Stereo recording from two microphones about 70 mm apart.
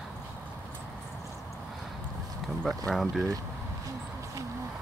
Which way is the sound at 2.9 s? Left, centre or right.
Centre.